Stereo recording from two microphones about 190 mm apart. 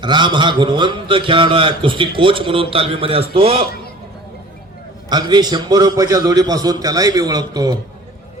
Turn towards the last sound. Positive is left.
turn(degrees=-20)  # may be behind; listen again after turning